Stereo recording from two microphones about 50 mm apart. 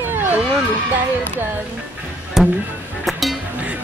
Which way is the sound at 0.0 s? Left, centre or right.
Right.